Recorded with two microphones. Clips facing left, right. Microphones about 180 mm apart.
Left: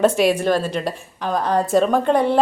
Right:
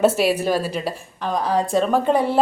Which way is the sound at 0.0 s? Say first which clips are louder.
Left 1 dB; 5° right (ahead or behind).